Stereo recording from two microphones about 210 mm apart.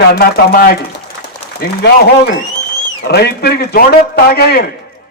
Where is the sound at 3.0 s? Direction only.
50° left (ahead or behind).